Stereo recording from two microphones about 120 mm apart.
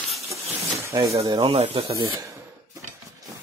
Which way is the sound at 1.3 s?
50° right (ahead or behind).